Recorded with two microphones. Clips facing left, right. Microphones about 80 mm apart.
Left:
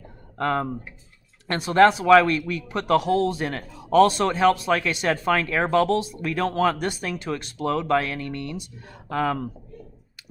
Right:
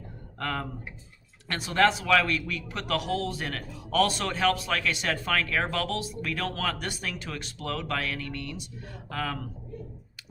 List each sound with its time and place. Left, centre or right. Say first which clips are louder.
0.3 s speech: left 8 dB; left